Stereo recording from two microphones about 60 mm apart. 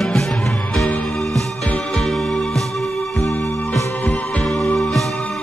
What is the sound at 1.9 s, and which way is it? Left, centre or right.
Music, centre.